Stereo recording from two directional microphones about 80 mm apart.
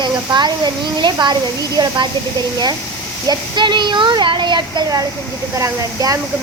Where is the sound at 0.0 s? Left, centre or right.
Right.